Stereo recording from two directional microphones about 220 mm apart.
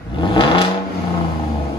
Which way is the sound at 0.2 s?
20° left (ahead or behind).